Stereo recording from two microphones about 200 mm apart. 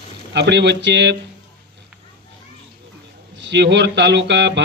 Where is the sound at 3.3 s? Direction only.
65° right (ahead or behind).